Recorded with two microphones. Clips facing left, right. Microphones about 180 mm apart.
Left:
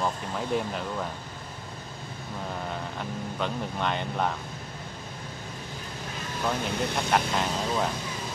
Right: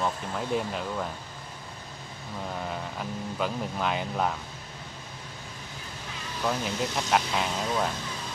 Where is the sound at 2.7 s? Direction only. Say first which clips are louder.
Even; 5° right (ahead or behind).